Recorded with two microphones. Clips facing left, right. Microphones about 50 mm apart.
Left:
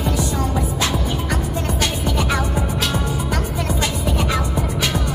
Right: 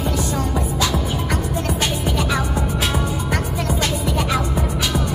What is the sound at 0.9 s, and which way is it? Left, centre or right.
Music, centre.